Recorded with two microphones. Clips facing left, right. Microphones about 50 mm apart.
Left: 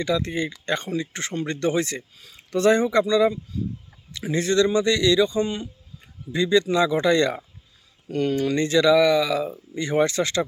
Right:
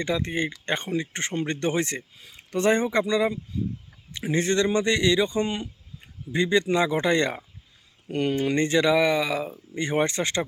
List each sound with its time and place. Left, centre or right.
0.0 s speech: right